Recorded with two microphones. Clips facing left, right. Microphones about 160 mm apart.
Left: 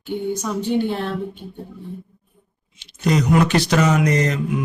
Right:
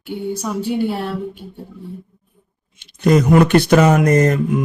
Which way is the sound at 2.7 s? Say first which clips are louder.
Right 5 dB; 50° right (ahead or behind).